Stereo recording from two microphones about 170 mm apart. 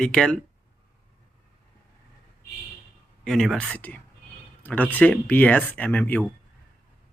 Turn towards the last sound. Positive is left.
turn(degrees=10)  # may be behind; listen again after turning